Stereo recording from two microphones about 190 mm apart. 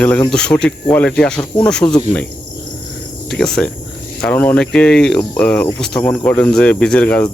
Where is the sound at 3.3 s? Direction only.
5° left (ahead or behind).